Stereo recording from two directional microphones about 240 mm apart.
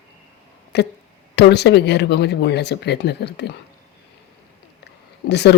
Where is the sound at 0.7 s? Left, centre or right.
Left.